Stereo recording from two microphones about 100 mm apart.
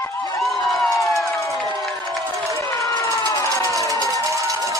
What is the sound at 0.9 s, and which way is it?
Crowd, 30° left (ahead or behind).